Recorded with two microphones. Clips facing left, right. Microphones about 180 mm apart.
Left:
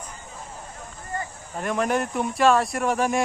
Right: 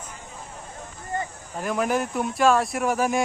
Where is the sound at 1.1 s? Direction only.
20° right (ahead or behind).